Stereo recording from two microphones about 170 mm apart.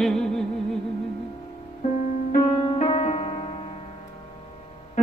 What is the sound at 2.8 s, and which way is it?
Music, 40° left (ahead or behind).